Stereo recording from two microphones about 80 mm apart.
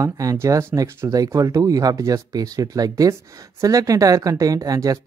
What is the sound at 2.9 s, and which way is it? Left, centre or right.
Speech, right.